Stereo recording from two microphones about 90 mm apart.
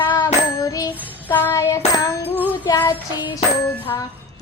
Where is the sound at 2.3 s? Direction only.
20° left (ahead or behind).